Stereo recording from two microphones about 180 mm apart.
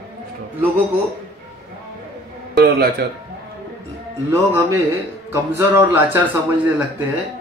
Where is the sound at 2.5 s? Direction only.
60° right (ahead or behind).